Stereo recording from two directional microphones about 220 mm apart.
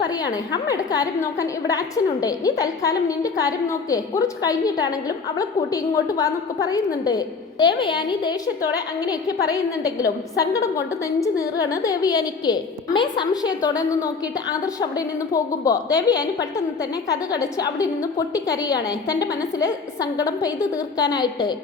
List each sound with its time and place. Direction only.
0.0 s a woman's voice: 20° left (ahead or behind)